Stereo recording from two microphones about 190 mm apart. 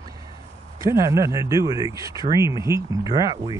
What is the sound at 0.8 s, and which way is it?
Speech, 15° right (ahead or behind).